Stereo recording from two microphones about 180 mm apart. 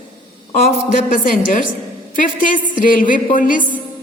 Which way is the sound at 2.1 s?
50° left (ahead or behind).